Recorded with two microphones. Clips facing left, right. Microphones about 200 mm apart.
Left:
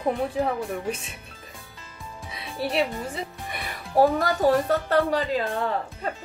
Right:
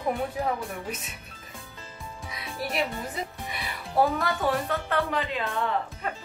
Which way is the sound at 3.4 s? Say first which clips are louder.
Left 1 dB; 55° left (ahead or behind).